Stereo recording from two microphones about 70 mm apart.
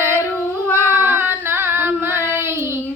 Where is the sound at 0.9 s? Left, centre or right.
Right.